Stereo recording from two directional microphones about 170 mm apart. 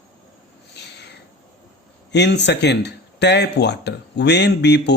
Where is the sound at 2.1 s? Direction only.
90° left.